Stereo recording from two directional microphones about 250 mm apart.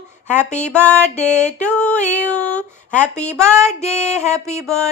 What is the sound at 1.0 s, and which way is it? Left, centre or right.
Music, left.